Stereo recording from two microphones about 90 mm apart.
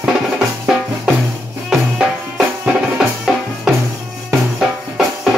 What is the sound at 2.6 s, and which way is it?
Music, 10° right (ahead or behind).